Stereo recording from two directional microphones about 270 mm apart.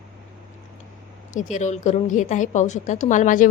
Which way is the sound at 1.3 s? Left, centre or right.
Left.